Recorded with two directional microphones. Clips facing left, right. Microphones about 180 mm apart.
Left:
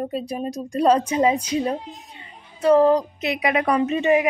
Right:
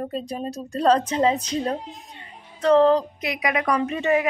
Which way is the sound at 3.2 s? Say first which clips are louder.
Left 3 dB; 25° left (ahead or behind).